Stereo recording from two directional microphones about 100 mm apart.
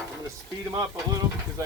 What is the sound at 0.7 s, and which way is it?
Speech, 40° right (ahead or behind).